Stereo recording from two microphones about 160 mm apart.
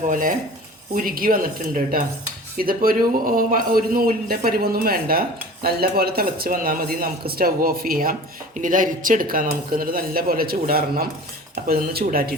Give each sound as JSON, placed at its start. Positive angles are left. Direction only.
{"t": 0.1, "sound": "speech", "side_deg": -60}